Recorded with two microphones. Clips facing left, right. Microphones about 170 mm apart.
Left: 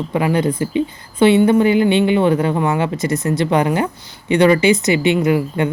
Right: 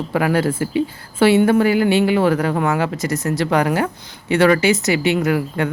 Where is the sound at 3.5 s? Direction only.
20° left (ahead or behind).